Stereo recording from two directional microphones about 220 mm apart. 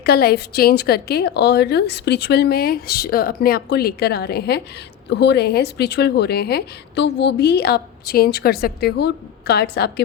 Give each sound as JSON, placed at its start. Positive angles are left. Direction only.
{"t": 0.0, "sound": "a woman's voice", "side_deg": 45}